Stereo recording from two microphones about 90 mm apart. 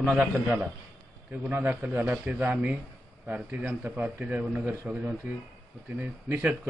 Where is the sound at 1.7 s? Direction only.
20° right (ahead or behind).